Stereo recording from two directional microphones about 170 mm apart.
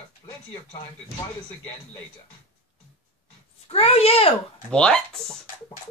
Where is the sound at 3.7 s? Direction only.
35° left (ahead or behind).